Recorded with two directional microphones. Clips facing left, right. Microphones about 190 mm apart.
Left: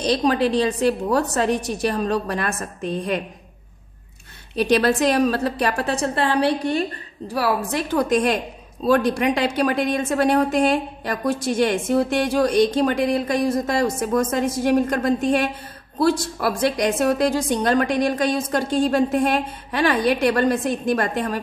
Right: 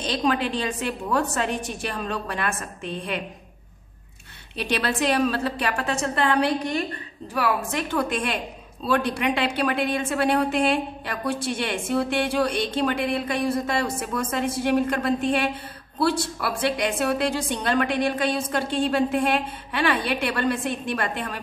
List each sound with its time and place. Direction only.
0.0 s a woman's voice: 40° left (ahead or behind)
4.6 s a woman's voice: 40° left (ahead or behind)